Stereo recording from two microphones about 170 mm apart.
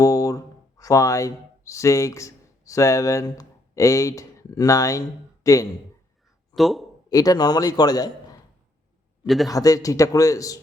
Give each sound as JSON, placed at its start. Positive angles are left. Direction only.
{"t": 0.0, "sound": "speech", "side_deg": 20}
{"t": 6.6, "sound": "a man's voice", "side_deg": 0}
{"t": 7.1, "sound": "a man's voice", "side_deg": 20}
{"t": 9.2, "sound": "a man's voice", "side_deg": 0}
{"t": 9.5, "sound": "a man's voice", "side_deg": 20}